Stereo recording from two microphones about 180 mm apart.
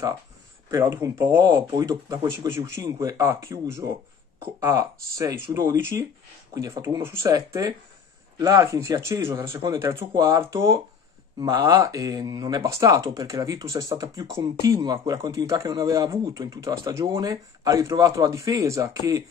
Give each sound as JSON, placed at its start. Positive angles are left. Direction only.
{"t": 0.7, "sound": "speech", "side_deg": -20}